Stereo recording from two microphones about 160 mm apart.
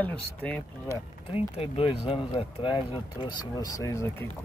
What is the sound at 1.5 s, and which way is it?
Speech, 40° left (ahead or behind).